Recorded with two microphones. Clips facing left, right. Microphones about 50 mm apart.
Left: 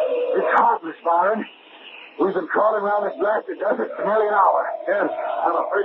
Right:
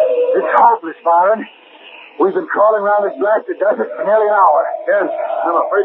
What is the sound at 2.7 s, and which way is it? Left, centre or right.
Speech, right.